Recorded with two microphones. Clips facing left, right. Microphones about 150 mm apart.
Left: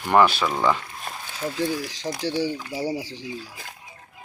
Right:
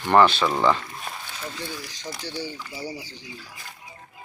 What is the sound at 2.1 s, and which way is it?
Speech, 80° left.